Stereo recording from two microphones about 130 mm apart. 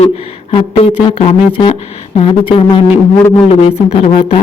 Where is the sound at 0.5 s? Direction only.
45° left (ahead or behind).